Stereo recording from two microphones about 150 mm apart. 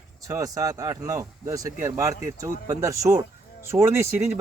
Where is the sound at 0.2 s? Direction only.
20° right (ahead or behind).